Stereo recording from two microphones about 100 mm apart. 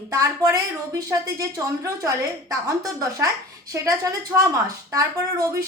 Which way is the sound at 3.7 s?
35° right (ahead or behind).